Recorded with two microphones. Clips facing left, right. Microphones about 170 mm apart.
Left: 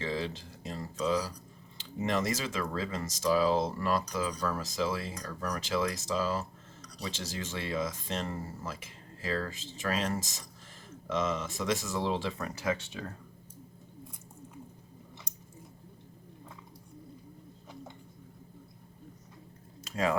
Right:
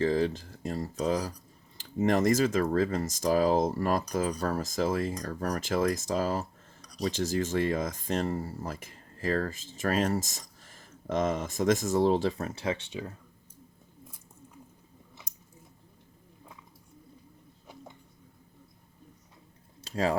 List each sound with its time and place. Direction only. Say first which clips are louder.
0.0 s speech: right 8 dB; 45° right (ahead or behind)
4.4 s speech: right 3 dB; 45° right (ahead or behind)
12.4 s speech: right 1 dB; 25° right (ahead or behind)
19.8 s a sound: right 2 dB; 30° right (ahead or behind)